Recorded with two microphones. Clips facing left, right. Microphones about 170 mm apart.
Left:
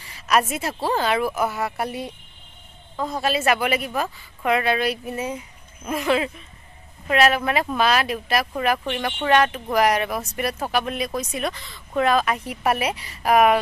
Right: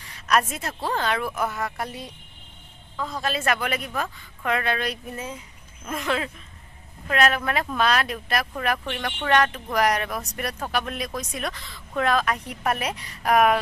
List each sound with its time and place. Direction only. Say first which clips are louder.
0.0 s a sound: left 2 dB; 5° left (ahead or behind)
0.8 s speech: left 4 dB; 10° left (ahead or behind)
3.2 s speech: left 4 dB; 10° left (ahead or behind)